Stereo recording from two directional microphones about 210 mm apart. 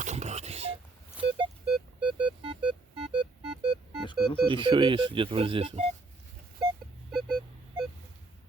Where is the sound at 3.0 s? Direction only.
5° right (ahead or behind).